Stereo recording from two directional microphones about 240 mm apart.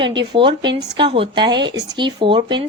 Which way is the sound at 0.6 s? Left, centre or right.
Right.